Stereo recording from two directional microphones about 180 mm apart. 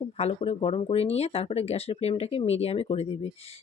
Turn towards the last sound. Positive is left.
turn(degrees=35)  # may be behind; listen again after turning